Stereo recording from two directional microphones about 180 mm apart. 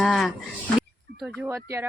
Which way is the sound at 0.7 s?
Centre (ahead or behind).